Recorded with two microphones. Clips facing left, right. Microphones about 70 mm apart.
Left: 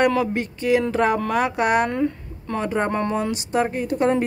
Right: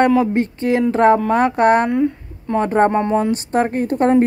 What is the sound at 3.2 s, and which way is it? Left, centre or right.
Speech, right.